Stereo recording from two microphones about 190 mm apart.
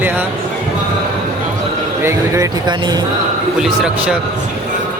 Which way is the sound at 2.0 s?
20° right (ahead or behind).